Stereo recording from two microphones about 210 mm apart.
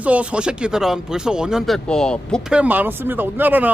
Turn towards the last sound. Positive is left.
turn(degrees=-10)  # may be behind; listen again after turning